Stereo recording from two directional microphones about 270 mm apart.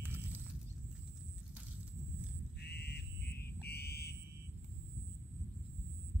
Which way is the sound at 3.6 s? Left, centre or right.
Left.